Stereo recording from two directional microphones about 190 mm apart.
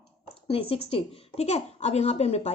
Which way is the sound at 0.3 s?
30° left (ahead or behind).